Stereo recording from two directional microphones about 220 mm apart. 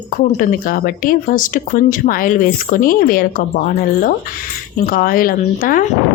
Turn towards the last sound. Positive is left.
turn(degrees=40)  # may be behind; listen again after turning